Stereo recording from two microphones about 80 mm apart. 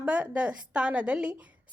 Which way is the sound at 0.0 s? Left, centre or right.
Centre.